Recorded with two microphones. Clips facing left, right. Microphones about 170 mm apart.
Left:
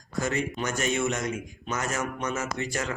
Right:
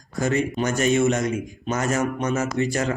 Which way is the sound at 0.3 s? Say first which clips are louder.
Right 8 dB; 30° right (ahead or behind).